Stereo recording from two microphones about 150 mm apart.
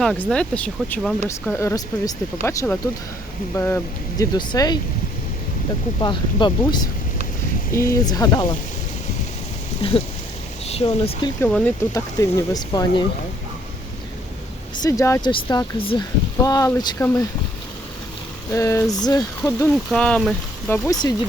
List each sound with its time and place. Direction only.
0.0 s speech: 5° left (ahead or behind)
4.2 s speech: 25° left (ahead or behind)
6.0 s speech: 30° left (ahead or behind)
7.7 s speech: 20° left (ahead or behind)
9.8 s speech: 40° left (ahead or behind)
11.3 s speech: 10° left (ahead or behind)
11.9 s speech: 20° left (ahead or behind)
14.8 s speech: 20° left (ahead or behind)
15.2 s speech: 30° left (ahead or behind)
18.5 s speech: 20° left (ahead or behind)
19.7 s speech: 5° left (ahead or behind)
20.7 s speech: 20° left (ahead or behind)